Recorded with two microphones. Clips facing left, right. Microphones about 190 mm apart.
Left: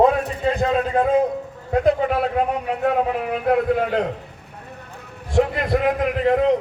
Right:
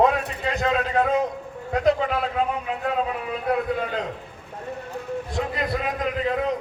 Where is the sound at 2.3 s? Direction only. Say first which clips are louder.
Left 4 dB; 65° left (ahead or behind).